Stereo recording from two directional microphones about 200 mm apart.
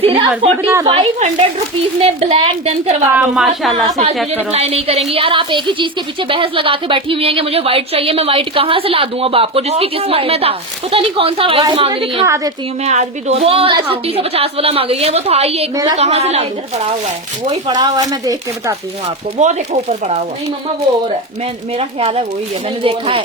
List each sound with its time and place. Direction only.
0.0 s a woman's voice: 30° right (ahead or behind)
3.1 s a woman's voice: 5° right (ahead or behind)
4.5 s a woman's voice: 30° right (ahead or behind)
12.2 s speech: 15° right (ahead or behind)
12.8 s speech: 35° right (ahead or behind)
15.7 s speech: 20° right (ahead or behind)
16.0 s a woman's voice: 35° right (ahead or behind)
17.7 s speech: 20° right (ahead or behind)
19.0 s a woman's voice: 35° right (ahead or behind)
21.8 s a woman's voice: 30° right (ahead or behind)